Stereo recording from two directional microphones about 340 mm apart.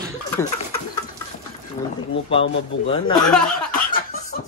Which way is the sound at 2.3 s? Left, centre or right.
Centre.